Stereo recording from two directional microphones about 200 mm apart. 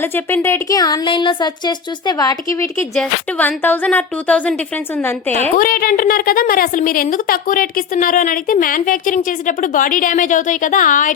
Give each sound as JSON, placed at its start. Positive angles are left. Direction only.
{"t": 0.0, "sound": "speech", "side_deg": 10}
{"t": 2.9, "sound": "a woman's voice", "side_deg": 5}
{"t": 5.5, "sound": "a woman's voice", "side_deg": 45}